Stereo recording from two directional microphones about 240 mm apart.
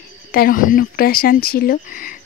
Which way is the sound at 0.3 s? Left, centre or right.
Left.